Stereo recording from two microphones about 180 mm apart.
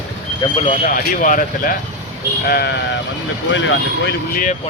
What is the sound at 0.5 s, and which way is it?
Speech, 35° left (ahead or behind).